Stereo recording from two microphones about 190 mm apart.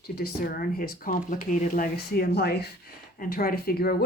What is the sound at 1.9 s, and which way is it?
Speech, 55° left (ahead or behind).